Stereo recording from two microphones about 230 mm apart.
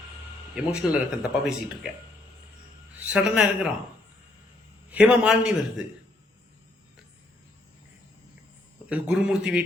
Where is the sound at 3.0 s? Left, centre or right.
Centre.